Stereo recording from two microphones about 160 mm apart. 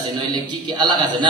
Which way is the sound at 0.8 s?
30° right (ahead or behind).